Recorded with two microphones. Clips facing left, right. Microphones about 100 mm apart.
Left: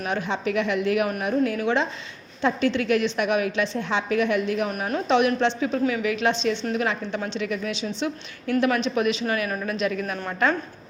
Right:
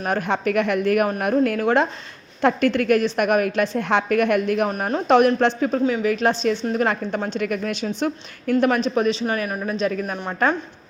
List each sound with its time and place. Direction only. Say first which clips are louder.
0.0 s a woman's voice: right 4 dB; 50° right (ahead or behind)
8.6 s speech: right 3 dB; 35° right (ahead or behind)